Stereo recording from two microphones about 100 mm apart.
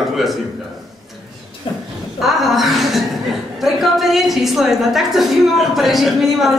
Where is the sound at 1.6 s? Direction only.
60° left (ahead or behind).